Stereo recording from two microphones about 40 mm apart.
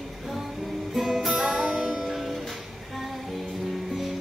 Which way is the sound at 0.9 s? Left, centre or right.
Centre.